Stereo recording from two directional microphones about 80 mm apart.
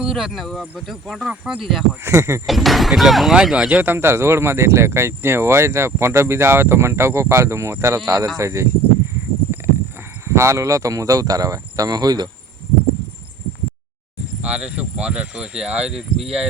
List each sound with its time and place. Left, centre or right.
0.0 s speech: centre
2.0 s speech: right
2.5 s speech: centre
3.9 s speech: right
10.2 s speech: right
14.4 s speech: centre